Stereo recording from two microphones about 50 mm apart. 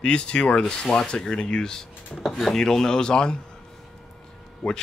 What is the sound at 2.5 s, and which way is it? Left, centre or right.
Speech, centre.